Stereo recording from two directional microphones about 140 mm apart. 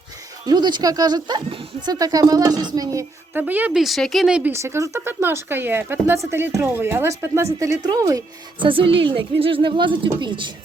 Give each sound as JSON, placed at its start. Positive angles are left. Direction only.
{"t": 0.4, "sound": "speech", "side_deg": -30}
{"t": 3.4, "sound": "a woman's voice", "side_deg": -10}
{"t": 3.8, "sound": "speech", "side_deg": 0}
{"t": 4.5, "sound": "a woman's voice", "side_deg": -20}
{"t": 8.6, "sound": "speech", "side_deg": -40}